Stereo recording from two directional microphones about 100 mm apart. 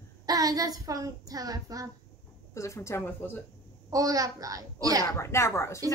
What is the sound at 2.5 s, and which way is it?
Speech, 30° left (ahead or behind).